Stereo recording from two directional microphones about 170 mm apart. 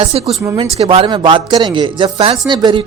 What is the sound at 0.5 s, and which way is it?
Speech, 35° right (ahead or behind).